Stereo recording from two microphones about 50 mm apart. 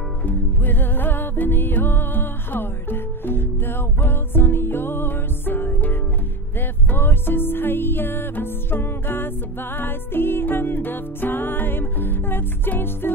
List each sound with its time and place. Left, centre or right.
0.2 s music: left